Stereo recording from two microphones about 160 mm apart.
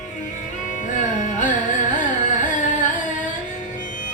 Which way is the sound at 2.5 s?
50° left (ahead or behind).